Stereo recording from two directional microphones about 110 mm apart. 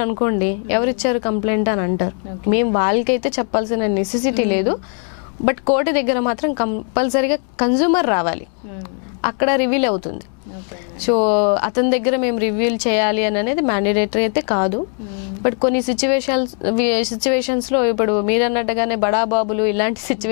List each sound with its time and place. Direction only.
0.0 s speech: 15° left (ahead or behind)
11.1 s speech: 10° left (ahead or behind)